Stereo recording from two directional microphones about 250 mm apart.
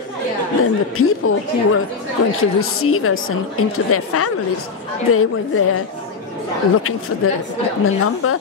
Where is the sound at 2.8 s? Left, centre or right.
Left.